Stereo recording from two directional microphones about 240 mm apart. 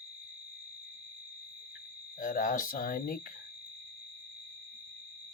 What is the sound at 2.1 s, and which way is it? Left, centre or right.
Speech, left.